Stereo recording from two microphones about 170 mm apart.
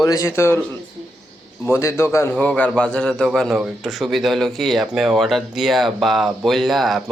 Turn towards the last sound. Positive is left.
turn(degrees=0)  # may be behind; listen again after turning